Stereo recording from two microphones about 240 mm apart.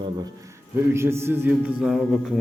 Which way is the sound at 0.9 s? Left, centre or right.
Centre.